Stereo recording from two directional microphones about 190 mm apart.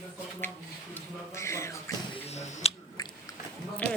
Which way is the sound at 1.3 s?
15° left (ahead or behind).